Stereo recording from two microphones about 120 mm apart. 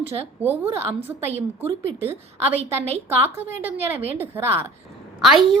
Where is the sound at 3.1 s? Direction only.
20° right (ahead or behind).